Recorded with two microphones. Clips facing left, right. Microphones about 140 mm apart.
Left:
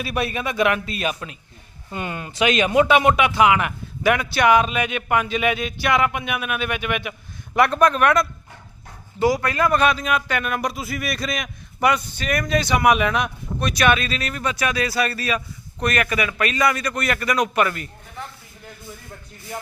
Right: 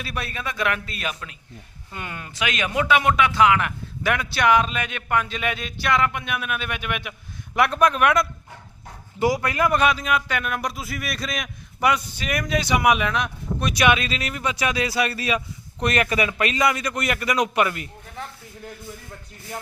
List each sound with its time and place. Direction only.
0.0 s a man's voice: 10° left (ahead or behind); by 8.3 s 10° right (ahead or behind)
9.1 s a man's voice: 20° right (ahead or behind); by 13.7 s 5° left (ahead or behind)
13.7 s a man's voice: 15° right (ahead or behind)